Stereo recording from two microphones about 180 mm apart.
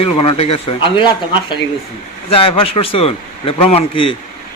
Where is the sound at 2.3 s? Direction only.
30° left (ahead or behind).